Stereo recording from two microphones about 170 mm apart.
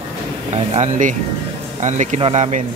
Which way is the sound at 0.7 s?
45° right (ahead or behind).